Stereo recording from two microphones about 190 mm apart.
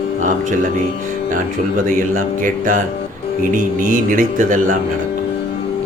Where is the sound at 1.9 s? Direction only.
45° right (ahead or behind).